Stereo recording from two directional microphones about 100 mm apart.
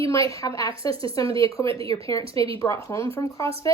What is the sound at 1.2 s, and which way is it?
Speech, 60° right (ahead or behind).